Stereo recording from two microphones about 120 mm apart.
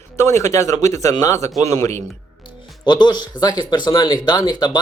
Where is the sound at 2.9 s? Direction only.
35° left (ahead or behind).